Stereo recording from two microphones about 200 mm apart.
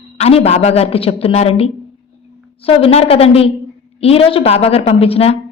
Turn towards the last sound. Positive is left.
turn(degrees=30)  # may be behind; listen again after turning